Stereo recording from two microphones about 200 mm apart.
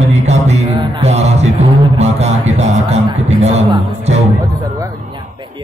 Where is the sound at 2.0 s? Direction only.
35° right (ahead or behind).